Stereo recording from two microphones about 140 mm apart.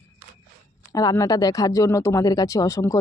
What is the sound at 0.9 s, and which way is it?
Speech, 25° left (ahead or behind).